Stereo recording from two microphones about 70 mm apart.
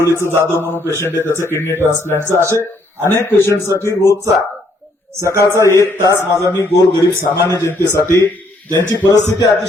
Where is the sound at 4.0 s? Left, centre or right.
Right.